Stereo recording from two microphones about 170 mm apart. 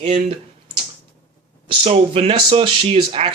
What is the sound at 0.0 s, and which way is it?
Speech, 35° right (ahead or behind).